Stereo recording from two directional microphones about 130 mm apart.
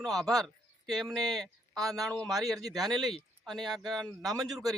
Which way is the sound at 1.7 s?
25° right (ahead or behind).